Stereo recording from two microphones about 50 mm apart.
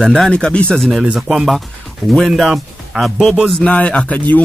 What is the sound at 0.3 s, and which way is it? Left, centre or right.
Speech, left.